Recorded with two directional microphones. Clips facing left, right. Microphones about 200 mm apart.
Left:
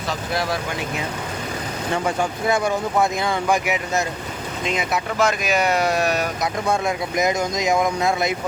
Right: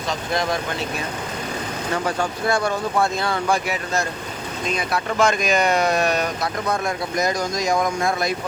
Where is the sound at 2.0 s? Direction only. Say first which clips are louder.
Left 1 dB; 20° left (ahead or behind).